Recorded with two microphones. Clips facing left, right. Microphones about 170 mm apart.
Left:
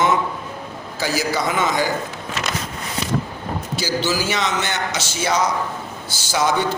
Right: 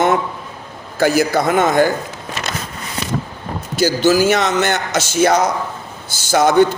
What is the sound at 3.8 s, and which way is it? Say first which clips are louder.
Speech: right 10 dB; 50° right (ahead or behind).